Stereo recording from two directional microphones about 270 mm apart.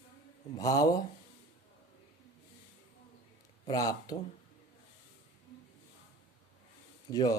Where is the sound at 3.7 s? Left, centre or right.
Centre.